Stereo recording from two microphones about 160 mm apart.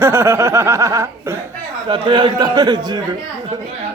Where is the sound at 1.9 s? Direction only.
30° right (ahead or behind).